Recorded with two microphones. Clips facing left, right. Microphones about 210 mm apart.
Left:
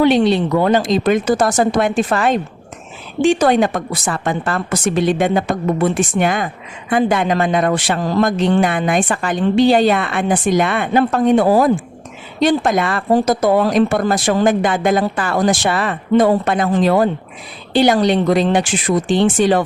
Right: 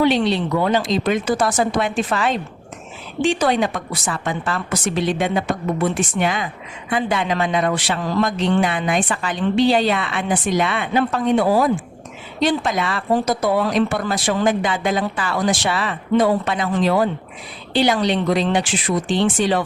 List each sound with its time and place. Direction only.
0.0 s speech: 50° left (ahead or behind)